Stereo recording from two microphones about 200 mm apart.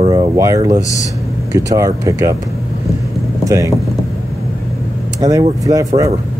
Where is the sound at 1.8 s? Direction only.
15° right (ahead or behind).